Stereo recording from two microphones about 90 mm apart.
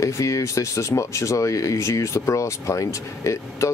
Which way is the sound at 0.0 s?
35° left (ahead or behind).